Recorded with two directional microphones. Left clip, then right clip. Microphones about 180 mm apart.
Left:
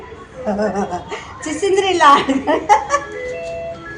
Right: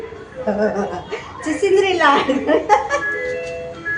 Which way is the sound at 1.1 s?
60° left (ahead or behind).